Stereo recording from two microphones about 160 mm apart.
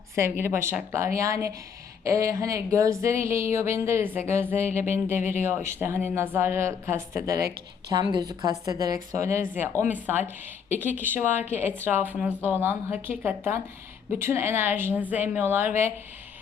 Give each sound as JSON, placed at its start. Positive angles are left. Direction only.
{"t": 0.2, "sound": "speech", "side_deg": -15}